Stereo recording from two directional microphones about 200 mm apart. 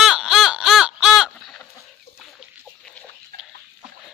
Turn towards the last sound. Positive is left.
turn(degrees=-50)  # may be behind; listen again after turning